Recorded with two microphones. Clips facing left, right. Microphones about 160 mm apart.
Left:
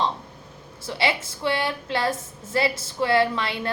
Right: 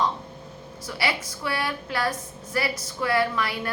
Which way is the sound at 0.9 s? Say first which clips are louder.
Left 3 dB; 25° left (ahead or behind).